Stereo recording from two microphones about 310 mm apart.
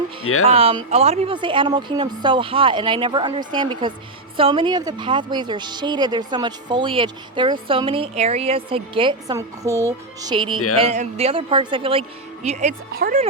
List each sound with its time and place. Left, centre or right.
0.3 s speech: left
0.5 s a woman's voice: centre